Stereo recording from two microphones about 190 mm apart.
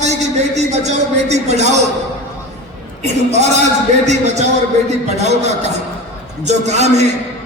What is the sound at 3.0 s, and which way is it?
A man's voice, 35° right (ahead or behind).